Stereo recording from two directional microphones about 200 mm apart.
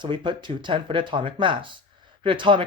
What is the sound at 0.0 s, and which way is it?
Speech, 25° right (ahead or behind).